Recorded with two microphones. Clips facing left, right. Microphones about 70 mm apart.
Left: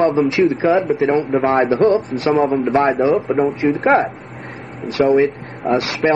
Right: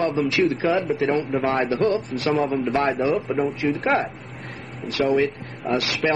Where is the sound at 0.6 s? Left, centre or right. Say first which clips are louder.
Left 8 dB; left.